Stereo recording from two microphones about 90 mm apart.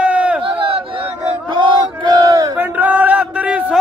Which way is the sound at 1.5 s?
60° right (ahead or behind).